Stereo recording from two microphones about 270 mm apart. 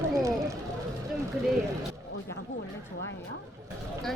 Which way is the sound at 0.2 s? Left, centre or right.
Centre.